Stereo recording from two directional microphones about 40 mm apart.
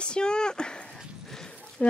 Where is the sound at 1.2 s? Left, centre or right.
Centre.